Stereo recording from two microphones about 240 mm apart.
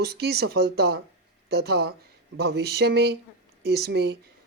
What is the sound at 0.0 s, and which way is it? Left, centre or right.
Speech, right.